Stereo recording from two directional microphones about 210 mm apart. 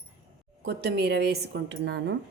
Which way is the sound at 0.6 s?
50° right (ahead or behind).